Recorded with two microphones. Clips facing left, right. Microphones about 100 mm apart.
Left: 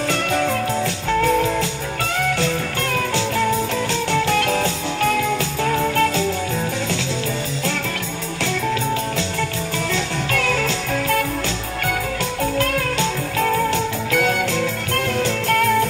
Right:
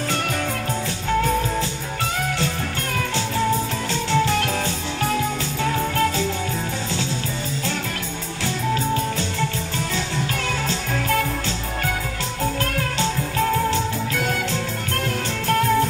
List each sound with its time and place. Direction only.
0.1 s music: 50° left (ahead or behind)
4.1 s music: 50° left (ahead or behind)
9.9 s music: 55° left (ahead or behind)
13.4 s music: 50° left (ahead or behind)